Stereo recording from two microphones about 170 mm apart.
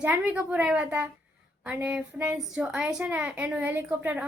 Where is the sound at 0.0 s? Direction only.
10° right (ahead or behind).